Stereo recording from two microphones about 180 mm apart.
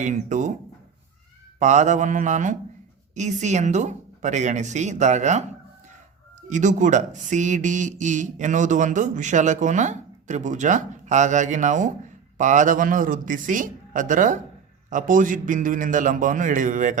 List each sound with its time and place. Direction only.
0.0 s speech: 45° right (ahead or behind)
1.5 s a woman's voice: 40° right (ahead or behind)
6.5 s speech: 45° right (ahead or behind)